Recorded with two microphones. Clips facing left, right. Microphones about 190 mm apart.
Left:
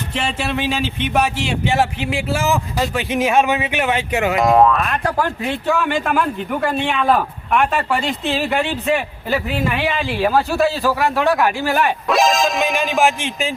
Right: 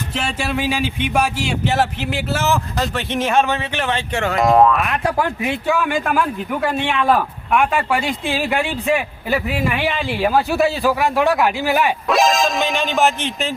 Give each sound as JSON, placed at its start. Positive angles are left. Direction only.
{"t": 0.1, "sound": "speech", "side_deg": -5}
{"t": 3.5, "sound": "speech", "side_deg": 15}
{"t": 4.8, "sound": "speech", "side_deg": -15}
{"t": 5.6, "sound": "speech", "side_deg": -5}